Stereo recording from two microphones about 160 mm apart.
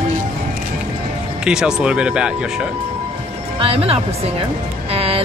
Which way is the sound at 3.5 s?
35° right (ahead or behind).